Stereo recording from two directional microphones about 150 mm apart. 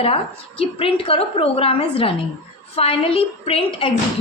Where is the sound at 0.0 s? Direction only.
40° left (ahead or behind).